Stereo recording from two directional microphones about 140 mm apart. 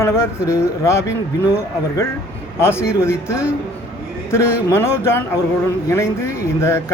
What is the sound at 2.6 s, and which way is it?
Speech, 20° left (ahead or behind).